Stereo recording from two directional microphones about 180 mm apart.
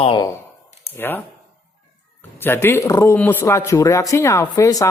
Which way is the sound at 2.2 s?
10° left (ahead or behind).